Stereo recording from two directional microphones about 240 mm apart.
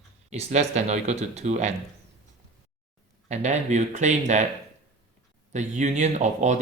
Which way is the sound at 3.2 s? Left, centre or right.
Right.